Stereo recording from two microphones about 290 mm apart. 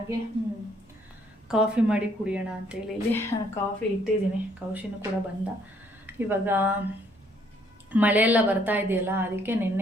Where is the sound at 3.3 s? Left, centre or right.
Left.